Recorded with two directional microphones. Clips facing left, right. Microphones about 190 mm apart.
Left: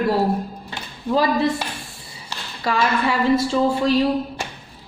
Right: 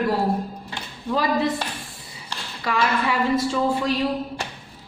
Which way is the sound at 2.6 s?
30° left (ahead or behind).